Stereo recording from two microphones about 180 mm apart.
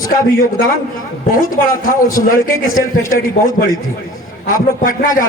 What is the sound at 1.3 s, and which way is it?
A man's voice, 50° left (ahead or behind).